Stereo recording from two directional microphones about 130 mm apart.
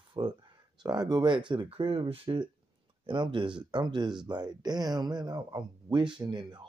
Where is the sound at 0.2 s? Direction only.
35° right (ahead or behind).